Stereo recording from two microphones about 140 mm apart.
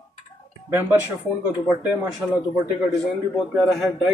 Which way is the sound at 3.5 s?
Centre (ahead or behind).